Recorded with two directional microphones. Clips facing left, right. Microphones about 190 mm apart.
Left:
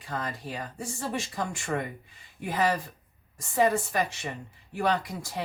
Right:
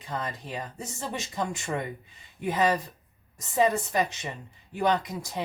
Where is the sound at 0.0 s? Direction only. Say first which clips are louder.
Even; 20° right (ahead or behind).